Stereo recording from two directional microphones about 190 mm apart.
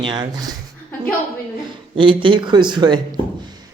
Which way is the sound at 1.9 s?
25° right (ahead or behind).